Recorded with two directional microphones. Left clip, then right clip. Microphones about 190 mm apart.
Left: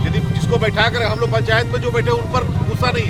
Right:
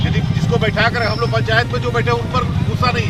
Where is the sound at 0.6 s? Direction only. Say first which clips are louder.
Even; 30° left (ahead or behind).